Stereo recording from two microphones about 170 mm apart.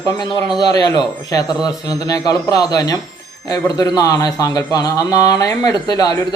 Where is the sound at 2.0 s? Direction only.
20° left (ahead or behind).